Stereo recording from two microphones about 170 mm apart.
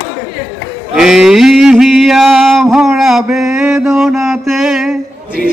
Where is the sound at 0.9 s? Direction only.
5° right (ahead or behind).